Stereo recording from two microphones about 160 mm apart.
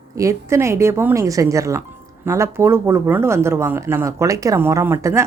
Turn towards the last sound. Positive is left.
turn(degrees=-15)  # may be behind; listen again after turning